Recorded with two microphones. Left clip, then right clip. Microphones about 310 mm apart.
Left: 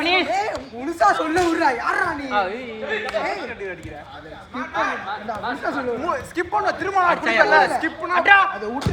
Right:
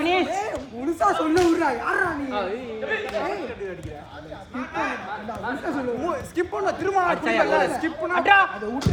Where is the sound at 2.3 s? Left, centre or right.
Centre.